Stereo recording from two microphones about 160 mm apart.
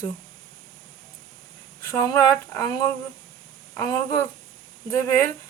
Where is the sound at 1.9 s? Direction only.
15° left (ahead or behind).